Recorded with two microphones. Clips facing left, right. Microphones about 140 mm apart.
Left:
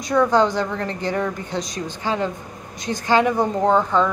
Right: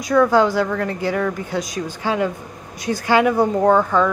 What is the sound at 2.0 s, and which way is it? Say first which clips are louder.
A woman's voice: right 2 dB; 10° right (ahead or behind).